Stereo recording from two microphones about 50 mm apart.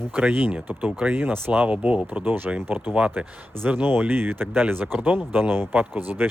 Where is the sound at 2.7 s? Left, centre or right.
Right.